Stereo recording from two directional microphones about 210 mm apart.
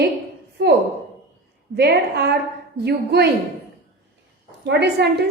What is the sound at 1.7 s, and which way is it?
A woman's voice, 50° right (ahead or behind).